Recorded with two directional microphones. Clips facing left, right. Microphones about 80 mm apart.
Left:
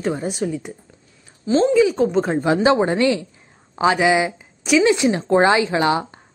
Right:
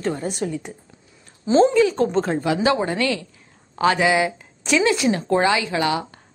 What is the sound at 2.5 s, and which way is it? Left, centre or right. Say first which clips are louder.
A woman's voice: left 5 dB; left.